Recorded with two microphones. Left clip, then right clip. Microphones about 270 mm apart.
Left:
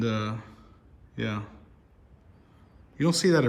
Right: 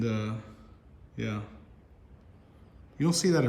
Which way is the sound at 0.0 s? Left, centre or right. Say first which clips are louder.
Left 3 dB; centre.